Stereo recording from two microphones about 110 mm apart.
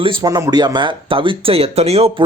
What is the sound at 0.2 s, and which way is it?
Speech, 35° right (ahead or behind).